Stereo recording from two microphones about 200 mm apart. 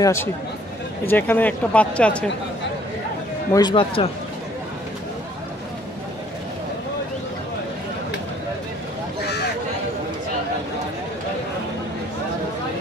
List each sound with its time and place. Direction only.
0.0 s speech: 15° left (ahead or behind)
3.5 s speech: 25° left (ahead or behind)